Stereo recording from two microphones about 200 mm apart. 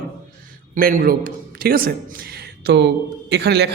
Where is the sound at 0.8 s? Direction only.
45° right (ahead or behind).